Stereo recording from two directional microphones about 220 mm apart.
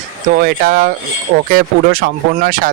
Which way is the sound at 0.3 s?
40° right (ahead or behind).